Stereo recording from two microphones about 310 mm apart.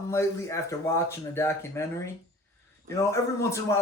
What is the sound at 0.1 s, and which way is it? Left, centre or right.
A man's voice, centre.